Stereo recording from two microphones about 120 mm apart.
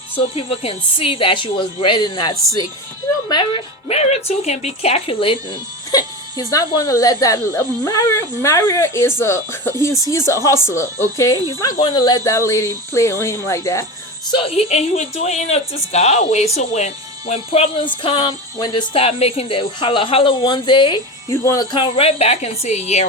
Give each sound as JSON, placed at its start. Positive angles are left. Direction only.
{"t": 0.2, "sound": "a woman's voice", "side_deg": 55}
{"t": 3.8, "sound": "speech", "side_deg": 65}
{"t": 5.9, "sound": "speech", "side_deg": 30}
{"t": 14.3, "sound": "a woman's voice", "side_deg": 50}
{"t": 18.0, "sound": "speech", "side_deg": 45}
{"t": 18.9, "sound": "a woman's voice", "side_deg": 55}
{"t": 21.2, "sound": "speech", "side_deg": 30}
{"t": 21.7, "sound": "speech", "side_deg": 45}